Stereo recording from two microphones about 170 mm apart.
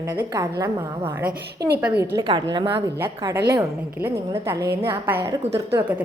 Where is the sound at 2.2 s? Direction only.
25° right (ahead or behind).